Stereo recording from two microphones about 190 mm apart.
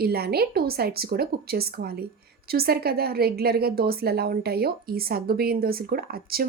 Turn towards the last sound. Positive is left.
turn(degrees=-50)  # may be behind; listen again after turning